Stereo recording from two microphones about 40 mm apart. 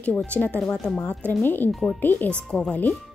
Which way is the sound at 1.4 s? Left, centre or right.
Left.